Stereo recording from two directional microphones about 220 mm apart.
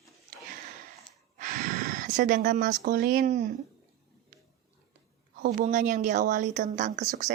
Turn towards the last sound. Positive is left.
turn(degrees=-35)  # may be behind; listen again after turning